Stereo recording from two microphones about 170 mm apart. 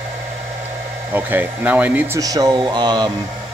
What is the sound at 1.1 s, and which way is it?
Speech, 10° right (ahead or behind).